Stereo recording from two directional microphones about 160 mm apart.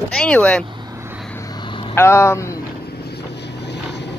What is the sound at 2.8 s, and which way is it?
Boat, 90° left.